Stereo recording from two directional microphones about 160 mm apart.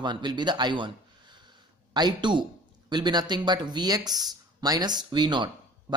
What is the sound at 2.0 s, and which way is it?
Speech, 25° right (ahead or behind).